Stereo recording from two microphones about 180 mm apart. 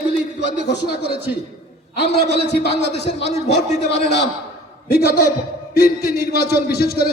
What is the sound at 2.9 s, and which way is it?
Speech, 40° left (ahead or behind).